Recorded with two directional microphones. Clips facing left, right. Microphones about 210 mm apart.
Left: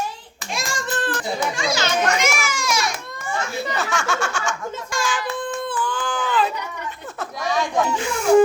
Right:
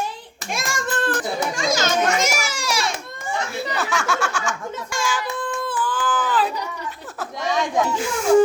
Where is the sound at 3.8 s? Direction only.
5° right (ahead or behind).